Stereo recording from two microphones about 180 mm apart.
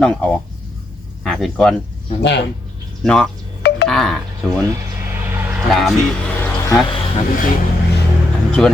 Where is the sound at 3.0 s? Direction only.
5° left (ahead or behind).